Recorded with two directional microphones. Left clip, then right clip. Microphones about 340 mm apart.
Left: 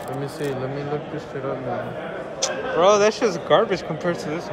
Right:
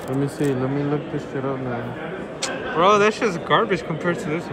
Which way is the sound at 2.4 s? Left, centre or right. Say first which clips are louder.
Even; centre.